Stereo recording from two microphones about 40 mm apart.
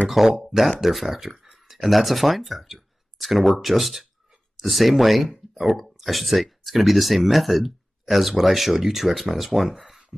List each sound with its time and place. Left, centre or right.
0.4 s speech: centre
5.5 s a sound: centre
5.8 s speech: centre